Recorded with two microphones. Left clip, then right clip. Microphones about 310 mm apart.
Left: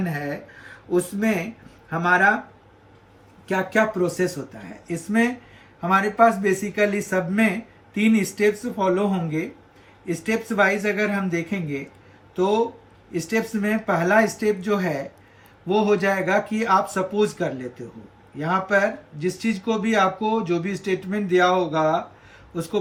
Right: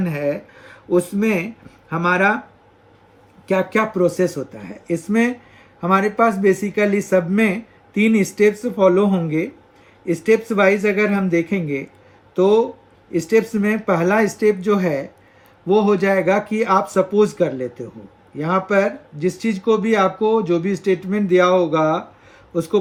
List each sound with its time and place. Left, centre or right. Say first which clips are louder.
0.1 s speech: right 7 dB; centre
3.4 s speech: right 3 dB; centre
13.2 s speech: right 7 dB; centre